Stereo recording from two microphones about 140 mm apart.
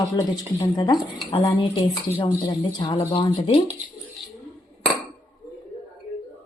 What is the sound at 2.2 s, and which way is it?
Speech, 35° left (ahead or behind).